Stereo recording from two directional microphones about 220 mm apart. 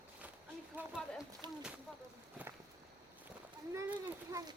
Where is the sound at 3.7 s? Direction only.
15° right (ahead or behind).